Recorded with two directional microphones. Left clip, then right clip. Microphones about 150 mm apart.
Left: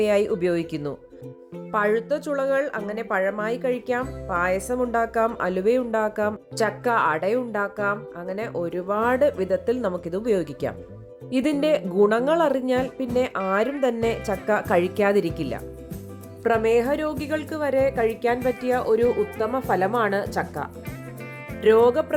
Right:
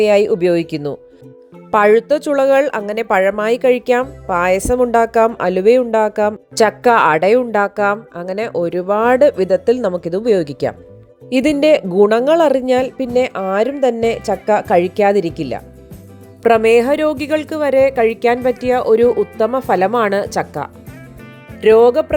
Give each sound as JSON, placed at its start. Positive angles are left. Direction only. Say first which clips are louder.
{"t": 0.0, "sound": "speech", "louder": "right 9 dB", "side_deg": -35}
{"t": 1.7, "sound": "a woman's voice", "louder": "right 11 dB", "side_deg": -50}
{"t": 6.7, "sound": "a woman's voice", "louder": "right 10 dB", "side_deg": -55}
{"t": 16.4, "sound": "a woman's voice", "louder": "right 9 dB", "side_deg": -65}